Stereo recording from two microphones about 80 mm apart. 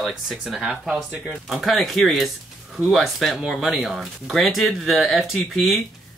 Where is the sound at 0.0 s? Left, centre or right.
Centre.